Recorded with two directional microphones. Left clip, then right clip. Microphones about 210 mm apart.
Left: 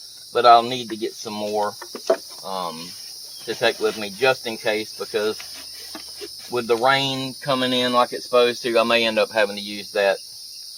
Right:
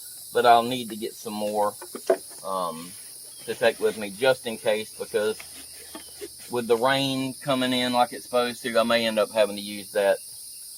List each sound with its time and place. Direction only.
0.3 s cricket: 25° left (ahead or behind)
1.9 s cricket: 10° left (ahead or behind)
2.5 s cricket: 20° left (ahead or behind)
6.5 s cricket: 25° left (ahead or behind)